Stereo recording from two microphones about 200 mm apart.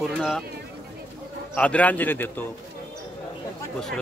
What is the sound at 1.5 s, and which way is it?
Speech, 5° left (ahead or behind).